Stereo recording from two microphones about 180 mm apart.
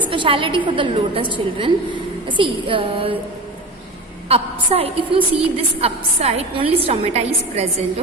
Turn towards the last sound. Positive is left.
turn(degrees=-35)  # may be behind; listen again after turning